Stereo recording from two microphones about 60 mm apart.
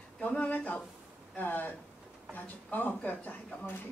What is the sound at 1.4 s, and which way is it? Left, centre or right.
Speech, left.